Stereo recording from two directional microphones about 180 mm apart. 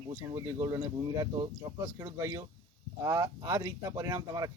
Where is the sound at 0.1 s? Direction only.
20° right (ahead or behind).